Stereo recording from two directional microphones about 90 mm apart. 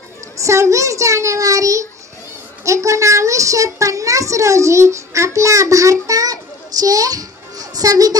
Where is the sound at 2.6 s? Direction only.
35° right (ahead or behind).